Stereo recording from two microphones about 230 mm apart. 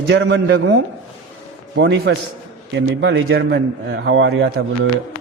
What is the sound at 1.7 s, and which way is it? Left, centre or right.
A man's voice, right.